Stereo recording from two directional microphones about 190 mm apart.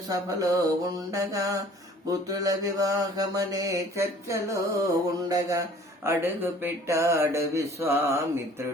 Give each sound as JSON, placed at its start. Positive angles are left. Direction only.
{"t": 0.1, "sound": "mantra", "side_deg": -20}